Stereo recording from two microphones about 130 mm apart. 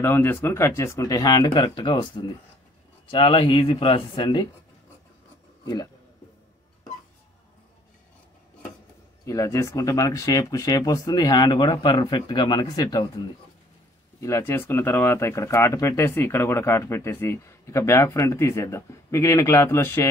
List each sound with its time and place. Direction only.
0.0 s speech: 15° left (ahead or behind); by 4.5 s 40° left (ahead or behind)
9.2 s speech: 25° left (ahead or behind)
14.2 s speech: 20° left (ahead or behind)